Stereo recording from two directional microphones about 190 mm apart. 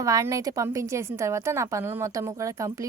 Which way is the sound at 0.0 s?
15° right (ahead or behind).